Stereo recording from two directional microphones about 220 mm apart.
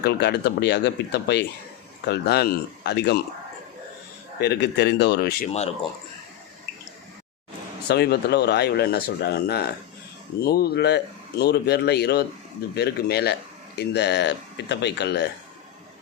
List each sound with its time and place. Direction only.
0.0 s speech: 50° left (ahead or behind)
4.4 s speech: 50° left (ahead or behind)
7.9 s speech: 45° left (ahead or behind)